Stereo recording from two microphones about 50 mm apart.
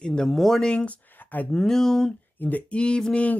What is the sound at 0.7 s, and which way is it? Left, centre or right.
Speech, left.